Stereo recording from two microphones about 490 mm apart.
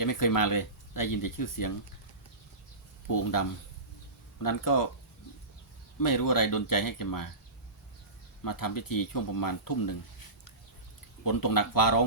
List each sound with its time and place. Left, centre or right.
0.0 s speech: left
3.1 s speech: left
4.4 s speech: left
6.0 s speech: left
8.4 s speech: left
11.2 s speech: left